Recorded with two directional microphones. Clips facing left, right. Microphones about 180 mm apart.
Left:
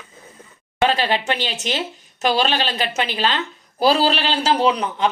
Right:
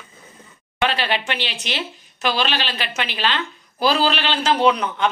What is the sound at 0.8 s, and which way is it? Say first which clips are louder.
Speech: left 3 dB; 40° left (ahead or behind).